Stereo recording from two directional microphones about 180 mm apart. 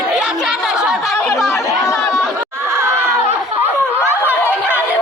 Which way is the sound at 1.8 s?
15° left (ahead or behind).